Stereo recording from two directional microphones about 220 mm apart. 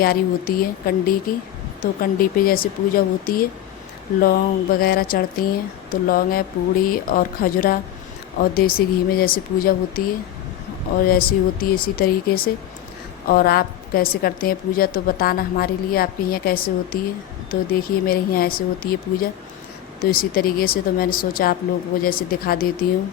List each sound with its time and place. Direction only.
0.0 s a woman's voice: 40° left (ahead or behind)
11.0 s a woman's voice: 40° left (ahead or behind)